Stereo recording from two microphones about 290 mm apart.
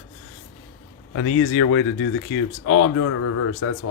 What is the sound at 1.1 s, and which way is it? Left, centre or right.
Speech, left.